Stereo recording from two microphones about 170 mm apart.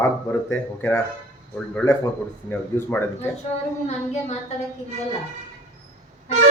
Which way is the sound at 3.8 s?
40° left (ahead or behind).